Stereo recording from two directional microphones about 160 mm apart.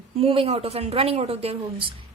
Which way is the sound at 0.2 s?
35° right (ahead or behind).